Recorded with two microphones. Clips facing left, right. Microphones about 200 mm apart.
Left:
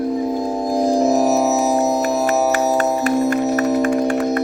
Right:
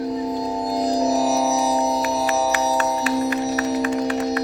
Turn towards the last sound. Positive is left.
turn(degrees=50)  # may be behind; listen again after turning